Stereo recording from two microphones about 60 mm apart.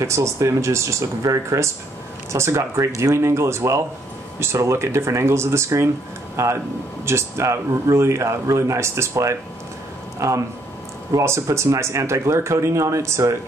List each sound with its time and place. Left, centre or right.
0.0 s speech: right
2.3 s speech: right
11.1 s speech: right